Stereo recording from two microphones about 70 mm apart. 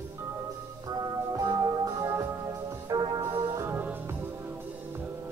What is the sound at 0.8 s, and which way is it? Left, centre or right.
Music, right.